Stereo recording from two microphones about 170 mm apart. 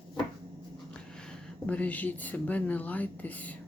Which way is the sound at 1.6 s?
10° left (ahead or behind).